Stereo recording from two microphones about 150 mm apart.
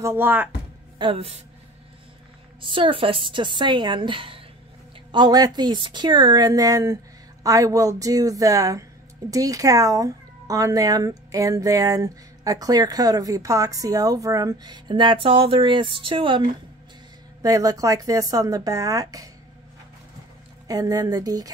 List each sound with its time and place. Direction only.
0.0 s speech: 15° right (ahead or behind)
0.9 s speech: 35° right (ahead or behind)
2.6 s speech: 35° right (ahead or behind)
17.4 s speech: 25° right (ahead or behind)
20.6 s speech: 25° right (ahead or behind)